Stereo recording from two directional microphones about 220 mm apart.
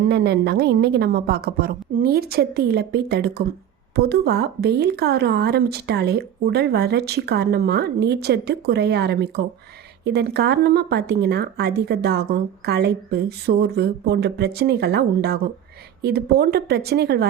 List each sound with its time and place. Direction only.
0.1 s speech: 50° right (ahead or behind)